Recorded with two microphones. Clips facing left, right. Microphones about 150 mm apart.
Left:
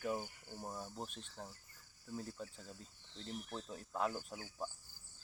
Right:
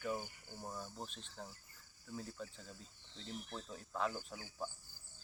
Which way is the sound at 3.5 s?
5° left (ahead or behind).